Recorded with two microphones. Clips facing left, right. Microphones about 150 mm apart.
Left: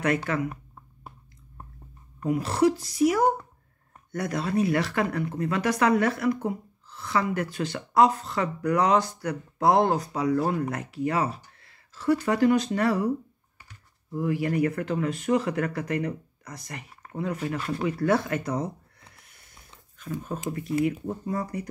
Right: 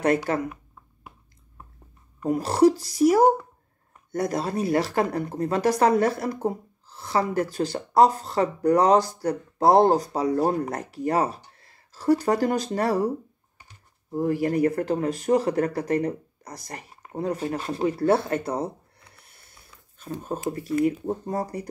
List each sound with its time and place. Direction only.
0.0 s speech: 35° right (ahead or behind)
2.2 s speech: 40° right (ahead or behind)
14.1 s speech: 40° right (ahead or behind)
20.4 s speech: 35° right (ahead or behind)